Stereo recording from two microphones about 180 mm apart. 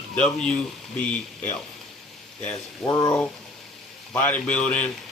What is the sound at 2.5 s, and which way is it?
Speech, 20° left (ahead or behind).